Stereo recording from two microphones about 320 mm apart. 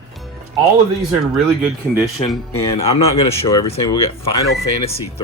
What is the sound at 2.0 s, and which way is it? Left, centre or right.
Speech, centre.